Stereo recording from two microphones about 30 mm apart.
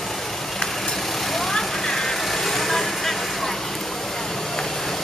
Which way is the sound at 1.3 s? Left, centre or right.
Centre.